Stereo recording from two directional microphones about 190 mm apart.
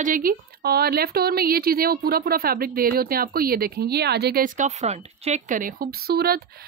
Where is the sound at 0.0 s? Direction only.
45° right (ahead or behind).